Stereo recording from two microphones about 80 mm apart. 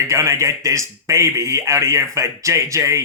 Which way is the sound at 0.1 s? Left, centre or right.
Right.